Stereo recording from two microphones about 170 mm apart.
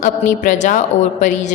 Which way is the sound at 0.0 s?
50° left (ahead or behind).